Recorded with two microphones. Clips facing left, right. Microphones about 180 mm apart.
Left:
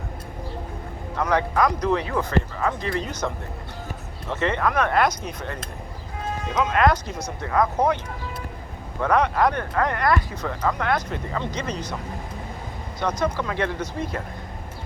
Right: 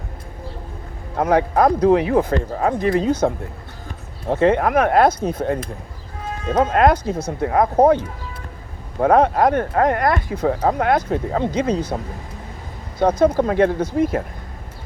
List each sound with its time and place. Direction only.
1.1 s speech: 50° right (ahead or behind)
9.0 s speech: 50° right (ahead or behind)
13.0 s speech: 55° right (ahead or behind)